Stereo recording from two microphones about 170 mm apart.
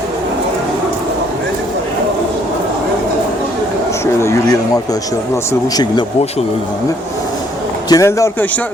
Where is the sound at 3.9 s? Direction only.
15° left (ahead or behind).